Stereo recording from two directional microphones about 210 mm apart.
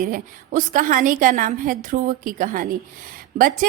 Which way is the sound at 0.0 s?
40° right (ahead or behind).